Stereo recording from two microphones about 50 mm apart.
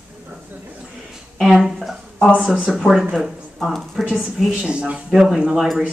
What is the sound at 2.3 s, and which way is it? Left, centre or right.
Speech, centre.